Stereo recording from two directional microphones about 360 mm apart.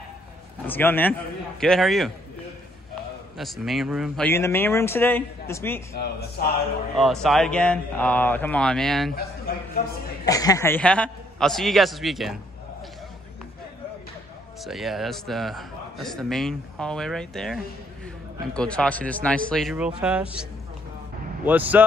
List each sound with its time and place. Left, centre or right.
0.7 s a man's voice: centre
3.3 s a man's voice: centre
5.9 s a man's voice: left
7.0 s a man's voice: centre
10.2 s a man's voice: centre
14.6 s a man's voice: centre
21.5 s a man's voice: centre